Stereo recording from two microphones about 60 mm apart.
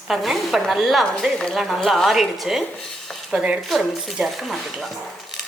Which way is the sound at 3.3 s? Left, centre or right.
Centre.